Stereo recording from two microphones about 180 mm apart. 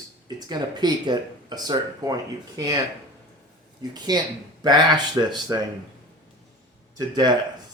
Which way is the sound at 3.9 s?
25° right (ahead or behind).